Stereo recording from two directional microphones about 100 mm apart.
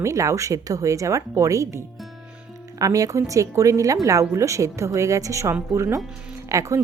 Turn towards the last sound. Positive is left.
turn(degrees=-30)  # may be behind; listen again after turning